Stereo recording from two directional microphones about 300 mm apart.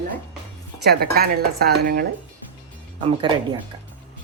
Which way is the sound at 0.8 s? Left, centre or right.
Right.